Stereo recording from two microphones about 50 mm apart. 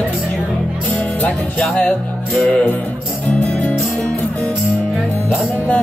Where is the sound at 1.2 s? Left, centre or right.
Left.